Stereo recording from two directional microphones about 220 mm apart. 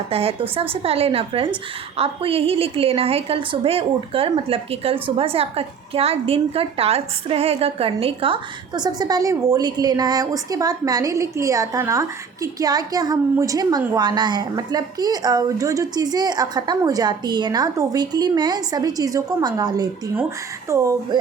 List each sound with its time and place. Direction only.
0.1 s a woman's voice: 25° right (ahead or behind)